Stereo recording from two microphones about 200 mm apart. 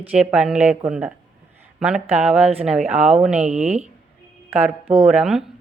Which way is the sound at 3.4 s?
35° right (ahead or behind).